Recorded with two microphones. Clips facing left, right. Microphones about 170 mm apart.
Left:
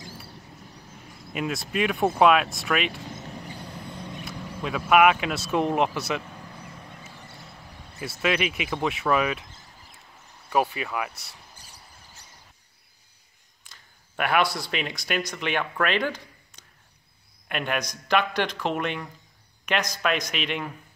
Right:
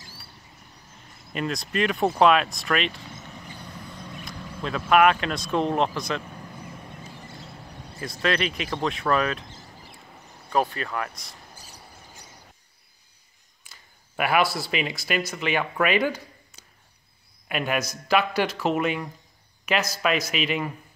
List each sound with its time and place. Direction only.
1.3 s speech: 5° left (ahead or behind)
3.2 s vehicle: 30° left (ahead or behind)
4.2 s speech: 5° left (ahead or behind)
8.2 s speech: 10° left (ahead or behind)
10.5 s speech: 10° left (ahead or behind)
13.7 s speech: 5° right (ahead or behind)